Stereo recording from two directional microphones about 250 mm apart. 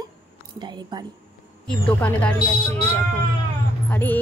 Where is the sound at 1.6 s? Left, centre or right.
Centre.